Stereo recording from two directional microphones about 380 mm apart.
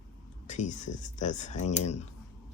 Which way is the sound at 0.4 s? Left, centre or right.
Centre.